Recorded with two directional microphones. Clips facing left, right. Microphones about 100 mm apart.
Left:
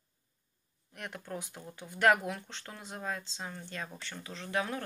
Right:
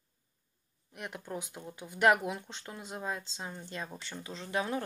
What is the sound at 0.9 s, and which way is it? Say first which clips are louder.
Speech: right 1 dB; 15° right (ahead or behind).